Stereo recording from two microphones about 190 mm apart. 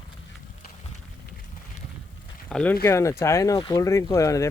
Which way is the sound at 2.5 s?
5° left (ahead or behind).